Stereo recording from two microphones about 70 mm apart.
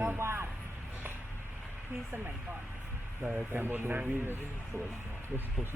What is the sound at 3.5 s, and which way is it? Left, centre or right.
Speech, right.